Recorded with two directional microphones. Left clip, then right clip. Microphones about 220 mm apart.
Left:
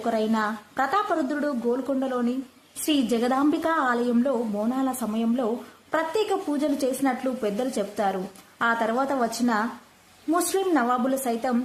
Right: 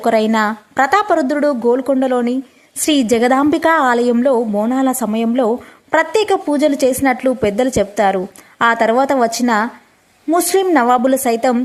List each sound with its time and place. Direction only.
0.0 s a woman's voice: 40° right (ahead or behind)